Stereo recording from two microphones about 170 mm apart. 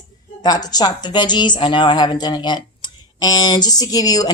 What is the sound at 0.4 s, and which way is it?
Speech, 25° left (ahead or behind).